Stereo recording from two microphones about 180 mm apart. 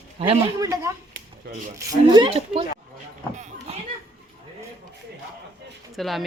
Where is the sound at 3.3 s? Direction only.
40° right (ahead or behind).